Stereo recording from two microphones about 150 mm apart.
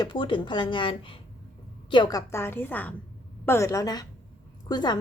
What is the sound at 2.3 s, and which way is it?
A woman's voice, 15° left (ahead or behind).